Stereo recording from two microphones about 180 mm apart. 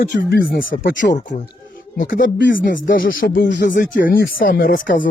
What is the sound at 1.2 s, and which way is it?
Speech, 40° left (ahead or behind).